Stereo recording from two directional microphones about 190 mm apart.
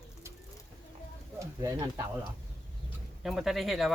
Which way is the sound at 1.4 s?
15° right (ahead or behind).